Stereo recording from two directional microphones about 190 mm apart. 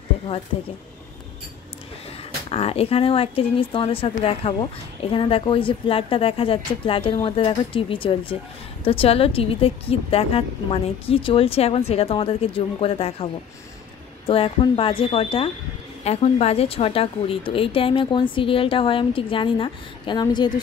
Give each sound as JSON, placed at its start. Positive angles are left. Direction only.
{"t": 2.5, "sound": "a woman's voice", "side_deg": 30}